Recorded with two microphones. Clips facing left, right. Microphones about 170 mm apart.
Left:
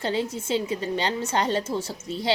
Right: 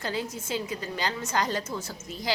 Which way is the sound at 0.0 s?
25° left (ahead or behind).